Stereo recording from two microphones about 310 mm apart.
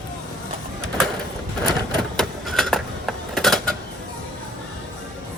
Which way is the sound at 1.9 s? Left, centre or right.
Centre.